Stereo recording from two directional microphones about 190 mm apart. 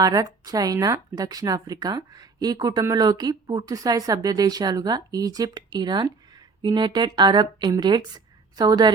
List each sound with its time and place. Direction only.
0.0 s speech: 20° right (ahead or behind)